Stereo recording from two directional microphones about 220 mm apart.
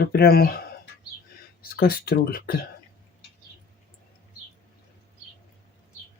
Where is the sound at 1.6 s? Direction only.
45° left (ahead or behind).